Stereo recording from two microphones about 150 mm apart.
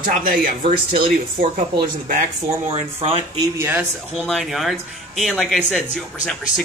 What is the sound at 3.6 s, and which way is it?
Speech, 15° right (ahead or behind).